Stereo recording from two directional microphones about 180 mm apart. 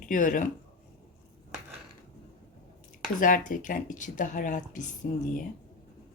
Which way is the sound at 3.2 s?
50° left (ahead or behind).